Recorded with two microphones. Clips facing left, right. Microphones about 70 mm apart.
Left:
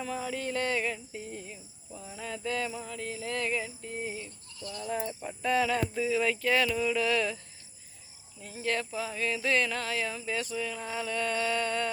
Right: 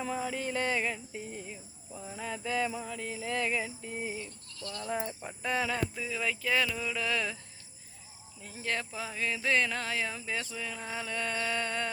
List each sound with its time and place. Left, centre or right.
0.0 s music: centre
4.2 s speech: centre
5.2 s music: centre
5.9 s music: centre
8.6 s speech: right